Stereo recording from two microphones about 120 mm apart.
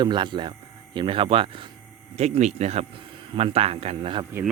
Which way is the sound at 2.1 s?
65° right (ahead or behind).